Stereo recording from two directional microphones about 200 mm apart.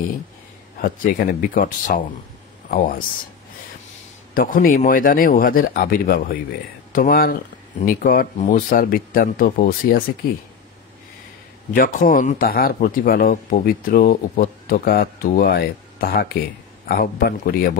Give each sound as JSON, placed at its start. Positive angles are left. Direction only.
{"t": 0.7, "sound": "speech", "side_deg": 45}
{"t": 4.3, "sound": "speech", "side_deg": 45}
{"t": 11.7, "sound": "speech", "side_deg": 45}